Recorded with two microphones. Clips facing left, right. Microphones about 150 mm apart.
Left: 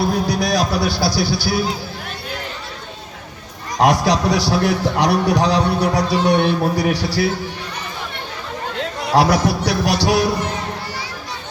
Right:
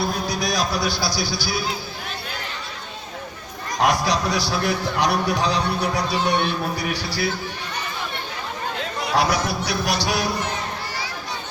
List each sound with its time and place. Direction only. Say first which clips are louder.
0.3 s speech: left 5 dB; 65° left (ahead or behind)
3.8 s a man's voice: left 5 dB; 75° left (ahead or behind)
9.1 s a man's voice: left 6 dB; 70° left (ahead or behind)